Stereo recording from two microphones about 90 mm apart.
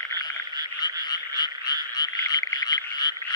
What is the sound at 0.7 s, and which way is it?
Frog, 50° left (ahead or behind).